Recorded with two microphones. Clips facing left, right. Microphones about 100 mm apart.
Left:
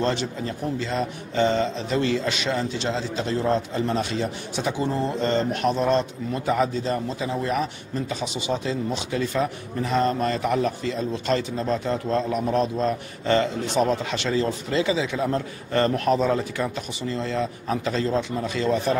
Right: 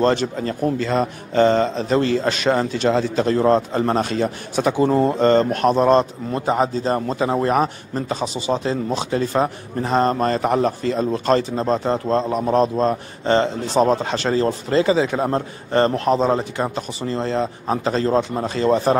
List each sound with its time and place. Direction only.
0.0 s a man's voice: 45° right (ahead or behind)
15.7 s a man's voice: 35° right (ahead or behind)